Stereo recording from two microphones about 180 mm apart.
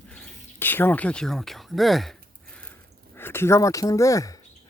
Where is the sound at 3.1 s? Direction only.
15° left (ahead or behind).